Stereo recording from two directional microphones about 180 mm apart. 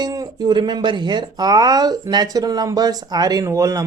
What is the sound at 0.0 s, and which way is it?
Speech, 20° right (ahead or behind).